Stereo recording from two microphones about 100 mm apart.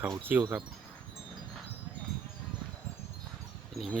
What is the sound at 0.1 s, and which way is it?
Speech, 20° right (ahead or behind).